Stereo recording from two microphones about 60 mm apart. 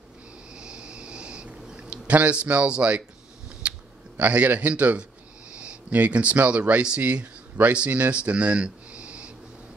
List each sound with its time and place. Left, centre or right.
0.6 s a sound: centre
3.6 s typing: right
4.2 s a man's voice: right